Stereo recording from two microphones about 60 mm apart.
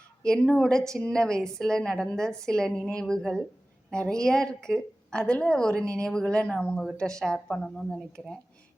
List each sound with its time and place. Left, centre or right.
0.2 s a woman's voice: centre
6.2 s a woman's voice: centre